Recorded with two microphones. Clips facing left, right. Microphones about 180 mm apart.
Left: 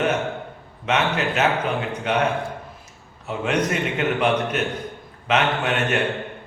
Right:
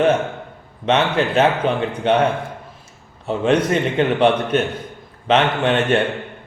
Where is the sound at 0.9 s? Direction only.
30° right (ahead or behind).